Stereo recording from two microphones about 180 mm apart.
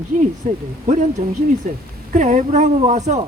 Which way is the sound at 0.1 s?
50° right (ahead or behind).